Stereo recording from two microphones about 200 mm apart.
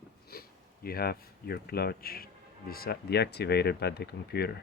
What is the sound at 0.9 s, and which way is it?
Speech, 50° left (ahead or behind).